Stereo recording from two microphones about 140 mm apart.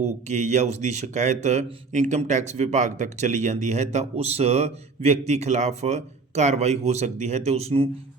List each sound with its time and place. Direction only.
0.0 s speech: 55° right (ahead or behind)